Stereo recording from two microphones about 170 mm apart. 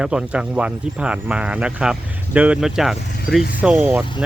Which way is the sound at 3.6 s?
5° right (ahead or behind).